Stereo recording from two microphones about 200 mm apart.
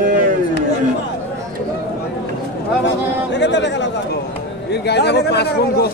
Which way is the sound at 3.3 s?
60° left (ahead or behind).